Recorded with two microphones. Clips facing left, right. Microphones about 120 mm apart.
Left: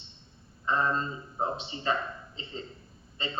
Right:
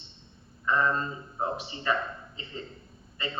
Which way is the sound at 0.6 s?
25° left (ahead or behind).